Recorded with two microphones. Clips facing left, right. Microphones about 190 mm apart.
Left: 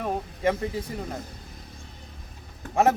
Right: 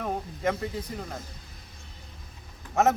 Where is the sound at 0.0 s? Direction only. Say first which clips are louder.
Left 3 dB; 5° left (ahead or behind).